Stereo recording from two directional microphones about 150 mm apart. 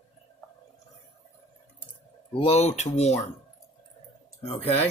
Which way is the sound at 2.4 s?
45° left (ahead or behind).